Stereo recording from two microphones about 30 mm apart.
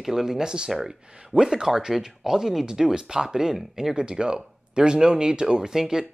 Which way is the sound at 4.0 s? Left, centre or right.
Right.